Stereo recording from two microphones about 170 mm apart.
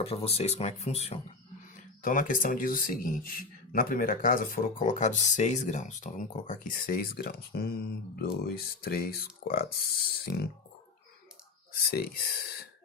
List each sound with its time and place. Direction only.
0.0 s speech: 35° left (ahead or behind)
2.0 s speech: 55° left (ahead or behind)
11.7 s speech: 65° left (ahead or behind)